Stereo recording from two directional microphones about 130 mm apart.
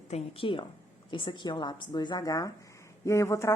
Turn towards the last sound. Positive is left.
turn(degrees=20)  # may be behind; listen again after turning